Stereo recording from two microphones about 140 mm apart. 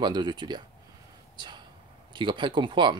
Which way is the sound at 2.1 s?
35° right (ahead or behind).